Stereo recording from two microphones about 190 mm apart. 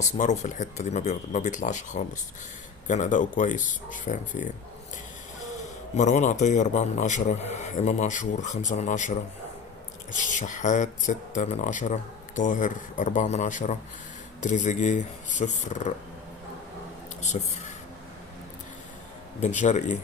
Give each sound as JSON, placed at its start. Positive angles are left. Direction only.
{"t": 0.0, "sound": "a man's voice", "side_deg": 40}
{"t": 6.0, "sound": "a man's voice", "side_deg": 40}
{"t": 19.4, "sound": "a man's voice", "side_deg": 40}